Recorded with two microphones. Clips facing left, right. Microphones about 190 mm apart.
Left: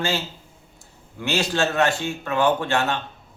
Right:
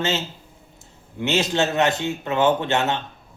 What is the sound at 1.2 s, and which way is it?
A man's voice, 20° right (ahead or behind).